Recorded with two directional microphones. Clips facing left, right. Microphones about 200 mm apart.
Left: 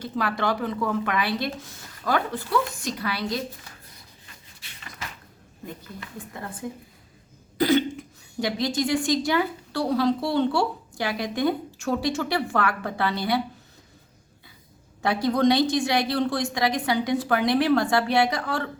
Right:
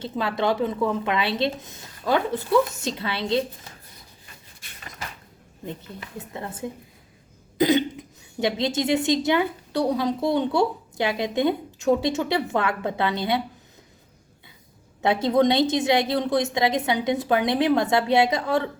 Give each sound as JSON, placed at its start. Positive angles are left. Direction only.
{"t": 0.0, "sound": "a woman's voice", "side_deg": -25}
{"t": 4.6, "sound": "cupboard open or close", "side_deg": -50}
{"t": 5.6, "sound": "a woman's voice", "side_deg": -25}
{"t": 15.0, "sound": "a woman's voice", "side_deg": -20}